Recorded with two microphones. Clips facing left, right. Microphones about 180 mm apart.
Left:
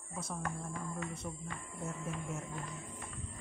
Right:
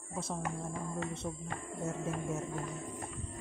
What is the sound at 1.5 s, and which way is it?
Speech, 55° right (ahead or behind).